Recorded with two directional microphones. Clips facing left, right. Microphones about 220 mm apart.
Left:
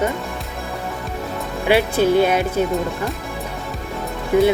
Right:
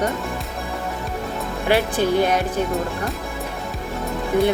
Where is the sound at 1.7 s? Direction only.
10° left (ahead or behind).